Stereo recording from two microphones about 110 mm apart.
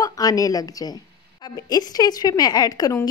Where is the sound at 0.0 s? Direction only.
35° left (ahead or behind).